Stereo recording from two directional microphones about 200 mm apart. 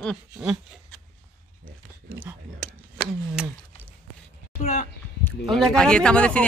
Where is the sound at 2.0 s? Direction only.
10° right (ahead or behind).